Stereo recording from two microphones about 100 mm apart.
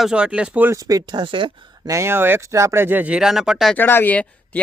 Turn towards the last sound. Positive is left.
turn(degrees=15)  # may be behind; listen again after turning